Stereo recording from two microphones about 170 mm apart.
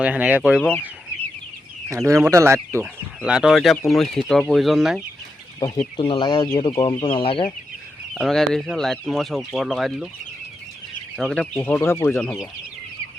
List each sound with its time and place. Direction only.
0.0 s speech: 10° right (ahead or behind)
1.9 s speech: 20° right (ahead or behind)
3.2 s speech: 5° right (ahead or behind)
5.5 s speech: 25° left (ahead or behind)
8.1 s speech: centre (ahead or behind)
11.2 s speech: 5° left (ahead or behind)